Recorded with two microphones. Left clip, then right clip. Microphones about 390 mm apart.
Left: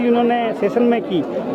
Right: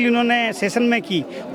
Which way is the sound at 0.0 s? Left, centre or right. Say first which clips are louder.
Left 2 dB; right.